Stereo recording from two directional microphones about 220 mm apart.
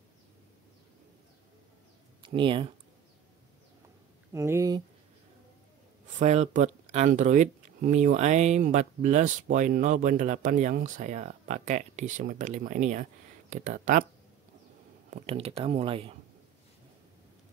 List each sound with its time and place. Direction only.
2.2 s speech: 20° right (ahead or behind)
4.3 s speech: 15° right (ahead or behind)
6.1 s speech: 30° right (ahead or behind)
15.0 s speech: 30° right (ahead or behind)